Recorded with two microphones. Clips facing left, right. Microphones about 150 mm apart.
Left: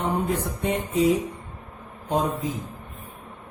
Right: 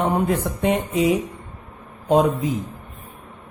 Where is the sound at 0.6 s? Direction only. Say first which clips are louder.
Right 4 dB; 90° right.